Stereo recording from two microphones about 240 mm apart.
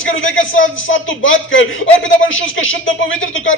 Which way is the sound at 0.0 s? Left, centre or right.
Left.